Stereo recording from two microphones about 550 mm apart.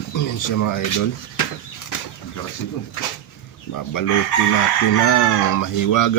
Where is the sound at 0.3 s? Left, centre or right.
Left.